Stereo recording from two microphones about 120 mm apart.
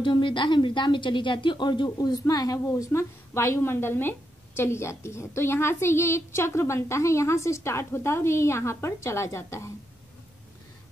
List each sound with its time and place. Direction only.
0.0 s a woman's voice: 40° left (ahead or behind); by 9.7 s 25° left (ahead or behind)